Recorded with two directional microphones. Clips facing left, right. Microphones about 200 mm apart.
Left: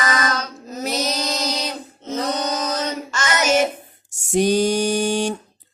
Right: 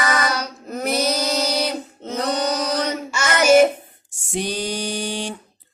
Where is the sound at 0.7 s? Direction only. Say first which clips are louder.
Right 3 dB; 55° right (ahead or behind).